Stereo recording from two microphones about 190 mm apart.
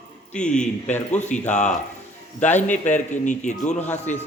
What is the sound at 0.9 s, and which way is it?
A man's voice, 40° left (ahead or behind).